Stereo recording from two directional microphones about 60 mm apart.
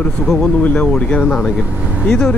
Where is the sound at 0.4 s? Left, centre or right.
Centre.